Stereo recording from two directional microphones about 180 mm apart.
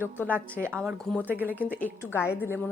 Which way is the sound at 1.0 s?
10° left (ahead or behind).